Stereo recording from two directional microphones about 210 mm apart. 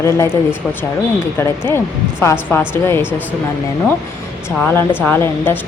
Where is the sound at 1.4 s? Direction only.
10° left (ahead or behind).